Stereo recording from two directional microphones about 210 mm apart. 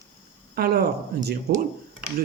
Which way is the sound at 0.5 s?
45° right (ahead or behind).